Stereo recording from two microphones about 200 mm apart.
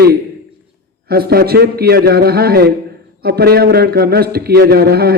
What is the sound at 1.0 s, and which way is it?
A man's voice, 50° right (ahead or behind).